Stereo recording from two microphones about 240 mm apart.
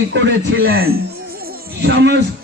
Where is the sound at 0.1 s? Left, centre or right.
Right.